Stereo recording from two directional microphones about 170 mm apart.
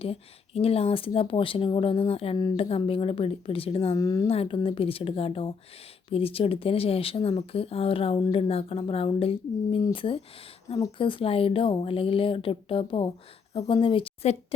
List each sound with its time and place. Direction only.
0.0 s speech: 35° left (ahead or behind)
3.9 s a woman's voice: 20° left (ahead or behind)
4.3 s a woman's voice: 35° left (ahead or behind)